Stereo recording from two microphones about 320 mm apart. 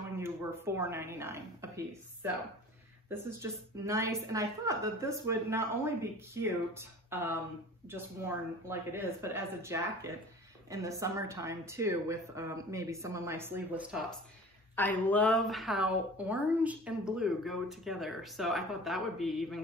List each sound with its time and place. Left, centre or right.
0.2 s speech: centre